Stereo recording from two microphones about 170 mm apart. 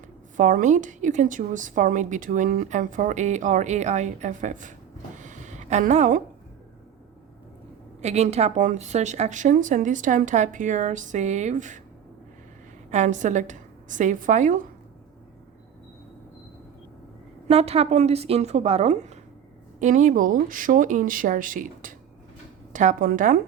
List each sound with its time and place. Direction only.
0.3 s a woman's voice: 50° right (ahead or behind)
5.2 s a sound: 45° right (ahead or behind)
8.0 s a woman's voice: 40° right (ahead or behind)
12.9 s a woman's voice: 45° right (ahead or behind)
17.5 s a woman's voice: 40° right (ahead or behind); by 23.4 s 55° right (ahead or behind)